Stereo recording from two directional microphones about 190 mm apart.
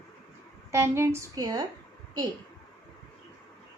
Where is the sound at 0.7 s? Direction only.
15° right (ahead or behind).